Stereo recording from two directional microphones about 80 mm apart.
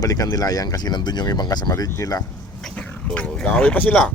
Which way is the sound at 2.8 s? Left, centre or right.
Centre.